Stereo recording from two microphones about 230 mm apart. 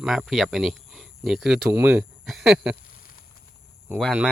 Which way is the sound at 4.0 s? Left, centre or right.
Centre.